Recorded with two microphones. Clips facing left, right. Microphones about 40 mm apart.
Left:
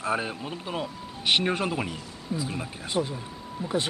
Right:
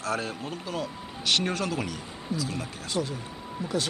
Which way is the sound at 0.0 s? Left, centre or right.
Left.